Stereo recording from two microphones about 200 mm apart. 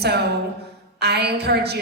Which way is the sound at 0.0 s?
55° right (ahead or behind).